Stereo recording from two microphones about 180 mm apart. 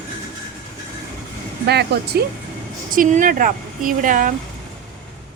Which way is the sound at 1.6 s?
65° right (ahead or behind).